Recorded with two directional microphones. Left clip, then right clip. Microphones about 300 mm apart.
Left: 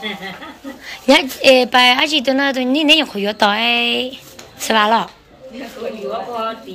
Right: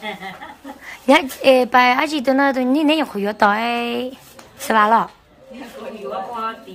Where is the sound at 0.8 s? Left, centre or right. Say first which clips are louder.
Left 2 dB; centre.